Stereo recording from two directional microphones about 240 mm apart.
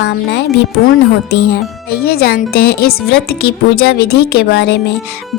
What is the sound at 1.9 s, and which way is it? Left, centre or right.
A woman's voice, left.